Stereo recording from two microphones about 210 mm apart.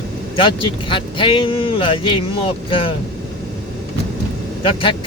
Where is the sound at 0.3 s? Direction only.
25° left (ahead or behind).